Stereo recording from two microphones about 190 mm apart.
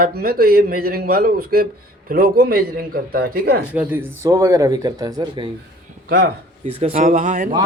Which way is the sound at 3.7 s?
10° right (ahead or behind).